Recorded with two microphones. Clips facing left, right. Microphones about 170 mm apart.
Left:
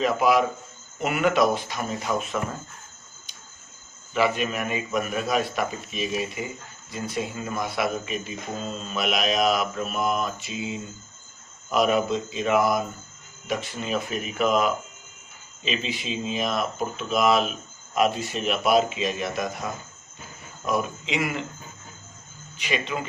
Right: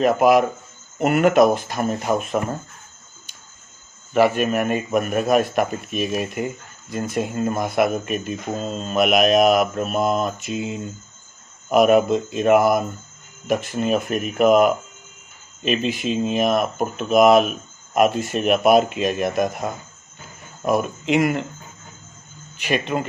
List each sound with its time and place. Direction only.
0.0 s speech: 50° right (ahead or behind)
4.1 s speech: 50° right (ahead or behind)
22.5 s speech: 50° right (ahead or behind)